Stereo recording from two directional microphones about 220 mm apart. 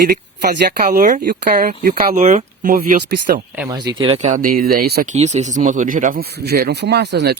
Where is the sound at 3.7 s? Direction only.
20° right (ahead or behind); by 7.4 s 50° right (ahead or behind).